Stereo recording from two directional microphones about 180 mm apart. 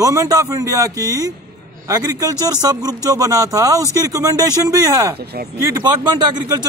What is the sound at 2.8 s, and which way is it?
A man's voice, 20° right (ahead or behind).